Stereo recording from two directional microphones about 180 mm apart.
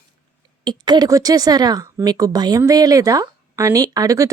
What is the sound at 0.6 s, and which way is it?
Speech, 25° right (ahead or behind).